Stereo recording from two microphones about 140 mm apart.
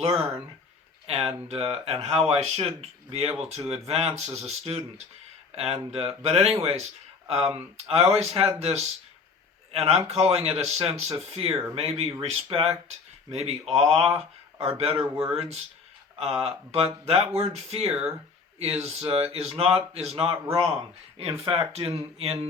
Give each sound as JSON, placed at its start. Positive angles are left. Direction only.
{"t": 0.0, "sound": "speech", "side_deg": -50}
{"t": 10.1, "sound": "speech", "side_deg": -50}